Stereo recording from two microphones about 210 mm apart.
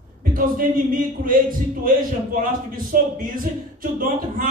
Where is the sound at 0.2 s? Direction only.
40° right (ahead or behind).